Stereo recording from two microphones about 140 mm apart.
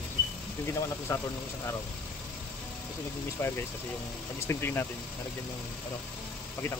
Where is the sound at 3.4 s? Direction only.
20° left (ahead or behind).